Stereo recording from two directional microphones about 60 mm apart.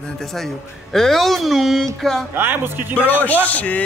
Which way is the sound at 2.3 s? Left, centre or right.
Right.